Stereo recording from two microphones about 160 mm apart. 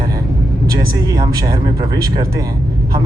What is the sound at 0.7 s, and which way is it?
Speech, 25° right (ahead or behind).